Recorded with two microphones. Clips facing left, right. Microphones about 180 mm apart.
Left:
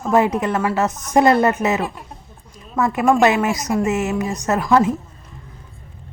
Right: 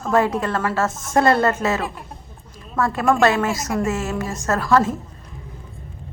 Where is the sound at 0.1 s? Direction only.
20° left (ahead or behind).